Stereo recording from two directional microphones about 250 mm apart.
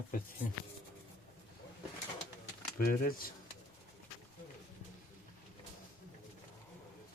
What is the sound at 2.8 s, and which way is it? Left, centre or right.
Speech, left.